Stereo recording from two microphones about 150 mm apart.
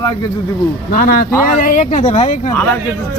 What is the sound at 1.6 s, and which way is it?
Speech, 55° left (ahead or behind).